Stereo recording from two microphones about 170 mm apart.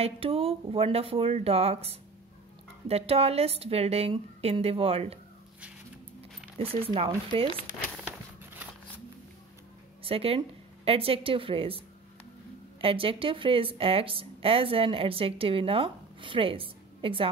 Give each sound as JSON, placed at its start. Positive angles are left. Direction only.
{"t": 0.0, "sound": "speech", "side_deg": -35}
{"t": 6.6, "sound": "speech", "side_deg": -35}
{"t": 10.0, "sound": "speech", "side_deg": -35}
{"t": 12.8, "sound": "speech", "side_deg": -30}